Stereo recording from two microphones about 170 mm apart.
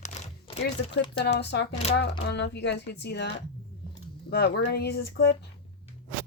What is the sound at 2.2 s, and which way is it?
Speech, 90° left.